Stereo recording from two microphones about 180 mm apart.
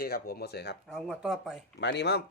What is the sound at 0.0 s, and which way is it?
Speech, 60° left (ahead or behind).